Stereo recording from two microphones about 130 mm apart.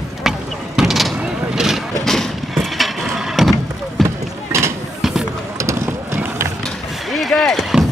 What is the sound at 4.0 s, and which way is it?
Run, centre (ahead or behind).